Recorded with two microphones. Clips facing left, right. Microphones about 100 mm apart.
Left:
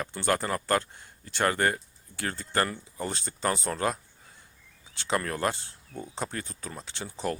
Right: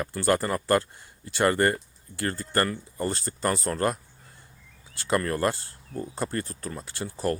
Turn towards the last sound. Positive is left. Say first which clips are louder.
# right 4 dB
turn(degrees=-5)  # may be behind; listen again after turning